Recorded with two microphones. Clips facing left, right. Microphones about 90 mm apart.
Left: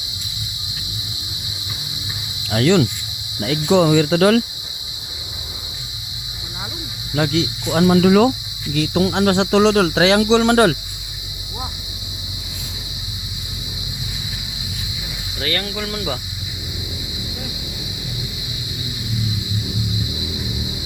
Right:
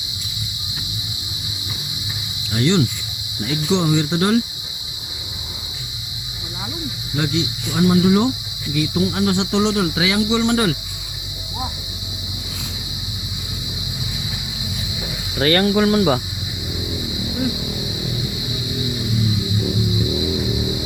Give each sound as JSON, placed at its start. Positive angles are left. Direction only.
{"t": 2.5, "sound": "cricket", "side_deg": 90}
{"t": 3.4, "sound": "speech", "side_deg": 65}
{"t": 7.2, "sound": "cricket", "side_deg": 90}
{"t": 8.7, "sound": "speech", "side_deg": 65}
{"t": 10.4, "sound": "cricket", "side_deg": 55}
{"t": 15.4, "sound": "speech", "side_deg": -45}
{"t": 15.6, "sound": "cricket", "side_deg": -40}